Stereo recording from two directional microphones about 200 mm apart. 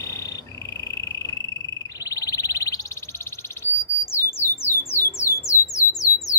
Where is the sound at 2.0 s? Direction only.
15° left (ahead or behind).